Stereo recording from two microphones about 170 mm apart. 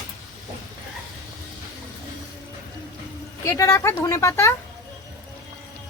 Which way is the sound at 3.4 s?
15° left (ahead or behind).